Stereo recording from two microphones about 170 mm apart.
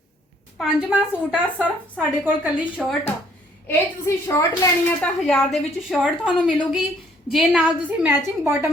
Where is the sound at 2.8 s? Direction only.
5° left (ahead or behind).